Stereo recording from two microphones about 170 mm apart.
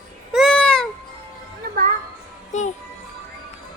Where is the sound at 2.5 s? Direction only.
45° left (ahead or behind).